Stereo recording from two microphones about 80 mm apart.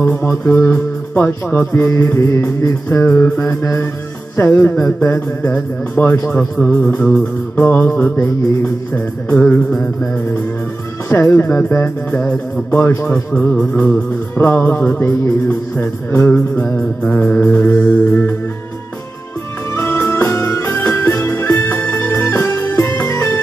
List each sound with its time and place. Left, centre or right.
0.0 s music: left
2.1 s a man's voice: left
3.2 s music: left
3.6 s a man's voice: left
4.4 s music: left
11.1 s a man's voice: left
11.7 s music: left
12.3 s a man's voice: left
13.4 s music: centre
19.7 s music: left